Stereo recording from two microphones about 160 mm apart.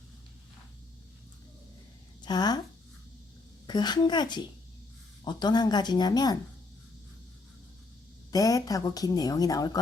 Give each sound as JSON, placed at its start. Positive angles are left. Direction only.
{"t": 2.2, "sound": "a woman's voice", "side_deg": 25}
{"t": 3.7, "sound": "a woman's voice", "side_deg": 25}
{"t": 8.3, "sound": "a woman's voice", "side_deg": 20}